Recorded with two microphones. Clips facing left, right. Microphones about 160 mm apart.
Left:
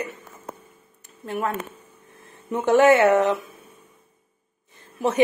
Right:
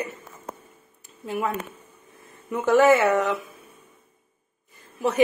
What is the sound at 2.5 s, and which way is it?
Speech, 20° left (ahead or behind).